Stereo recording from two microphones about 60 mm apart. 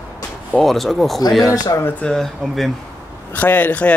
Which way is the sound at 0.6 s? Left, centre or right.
Centre.